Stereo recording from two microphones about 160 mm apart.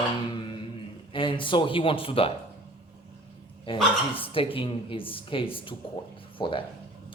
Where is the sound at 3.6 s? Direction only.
35° left (ahead or behind).